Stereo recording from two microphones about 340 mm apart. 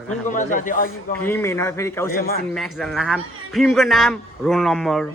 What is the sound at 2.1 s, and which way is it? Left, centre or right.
Speech, left.